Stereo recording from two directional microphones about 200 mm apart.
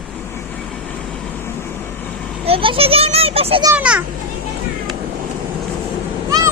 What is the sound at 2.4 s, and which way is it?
A child's voice, 25° right (ahead or behind).